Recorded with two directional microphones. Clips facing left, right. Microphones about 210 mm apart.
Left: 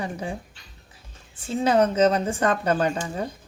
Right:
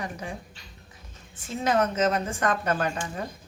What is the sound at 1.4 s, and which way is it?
Speech, 30° left (ahead or behind).